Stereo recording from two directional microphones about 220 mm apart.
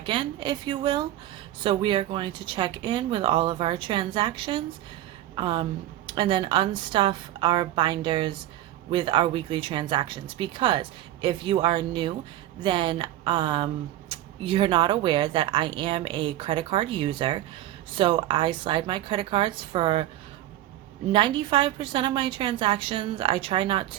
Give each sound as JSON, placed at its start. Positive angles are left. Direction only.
{"t": 0.0, "sound": "speech", "side_deg": -20}
{"t": 21.1, "sound": "speech", "side_deg": -20}